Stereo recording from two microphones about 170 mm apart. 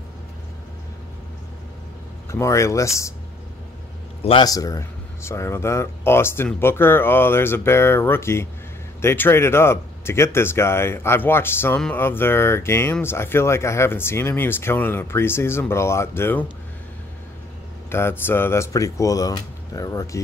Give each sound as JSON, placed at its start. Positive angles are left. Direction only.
{"t": 2.2, "sound": "speech", "side_deg": 15}
{"t": 4.2, "sound": "a man's voice", "side_deg": 35}
{"t": 4.5, "sound": "speech", "side_deg": 20}
{"t": 17.8, "sound": "speech", "side_deg": 15}